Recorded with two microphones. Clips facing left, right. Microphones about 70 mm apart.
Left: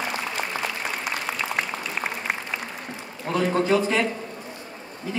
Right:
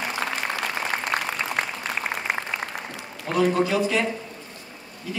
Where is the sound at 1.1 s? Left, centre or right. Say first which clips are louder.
Right 5 dB; right.